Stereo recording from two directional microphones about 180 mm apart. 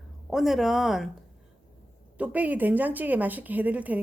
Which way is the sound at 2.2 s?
10° right (ahead or behind).